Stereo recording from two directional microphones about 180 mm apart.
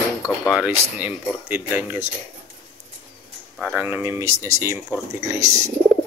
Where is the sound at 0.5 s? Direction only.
5° right (ahead or behind).